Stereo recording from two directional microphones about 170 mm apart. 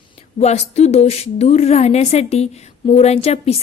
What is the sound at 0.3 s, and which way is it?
A woman's voice, 40° left (ahead or behind).